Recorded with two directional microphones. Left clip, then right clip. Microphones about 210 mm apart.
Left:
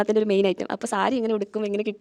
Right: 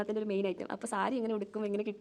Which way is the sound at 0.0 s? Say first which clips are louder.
Left 13 dB; 45° left (ahead or behind).